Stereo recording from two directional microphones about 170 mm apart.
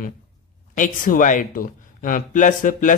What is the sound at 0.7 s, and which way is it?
Speech, 50° left (ahead or behind).